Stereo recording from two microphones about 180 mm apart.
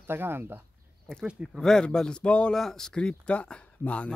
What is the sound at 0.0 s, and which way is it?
Speech, 10° right (ahead or behind).